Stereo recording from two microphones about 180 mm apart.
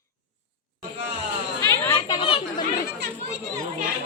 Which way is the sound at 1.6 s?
20° left (ahead or behind).